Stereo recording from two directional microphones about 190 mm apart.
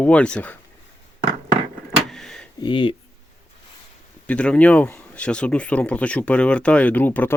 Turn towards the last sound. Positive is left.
turn(degrees=10)  # may be behind; listen again after turning